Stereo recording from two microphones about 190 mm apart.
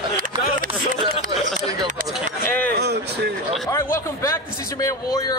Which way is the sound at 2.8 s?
60° right (ahead or behind).